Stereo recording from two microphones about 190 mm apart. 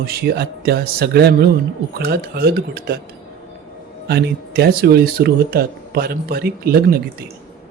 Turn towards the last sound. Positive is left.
turn(degrees=-50)  # may be behind; listen again after turning